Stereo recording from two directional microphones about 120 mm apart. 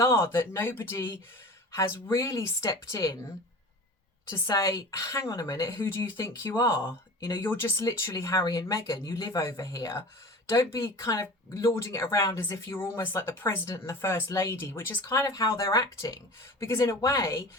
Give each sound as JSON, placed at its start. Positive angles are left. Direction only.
{"t": 0.0, "sound": "speech", "side_deg": 25}
{"t": 4.3, "sound": "speech", "side_deg": 30}